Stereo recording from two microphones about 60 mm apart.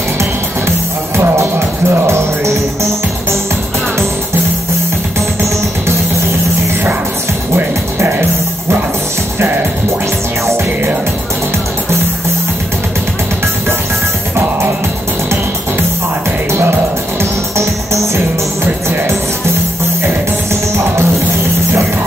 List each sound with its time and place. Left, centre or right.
0.2 s music: right
8.0 s music: right
17.2 s music: right
20.7 s music: right